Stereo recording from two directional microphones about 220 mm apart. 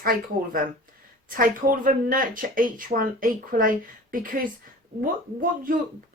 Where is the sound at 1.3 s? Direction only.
40° right (ahead or behind).